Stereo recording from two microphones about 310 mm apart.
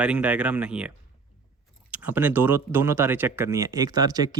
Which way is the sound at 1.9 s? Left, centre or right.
Centre.